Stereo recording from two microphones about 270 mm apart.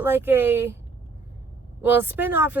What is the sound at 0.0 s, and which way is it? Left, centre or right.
Speech, centre.